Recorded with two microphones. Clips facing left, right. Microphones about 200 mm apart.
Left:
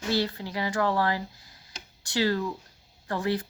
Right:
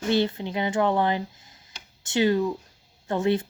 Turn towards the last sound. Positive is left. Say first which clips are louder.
# right 5 dB
turn(degrees=-25)  # may be behind; listen again after turning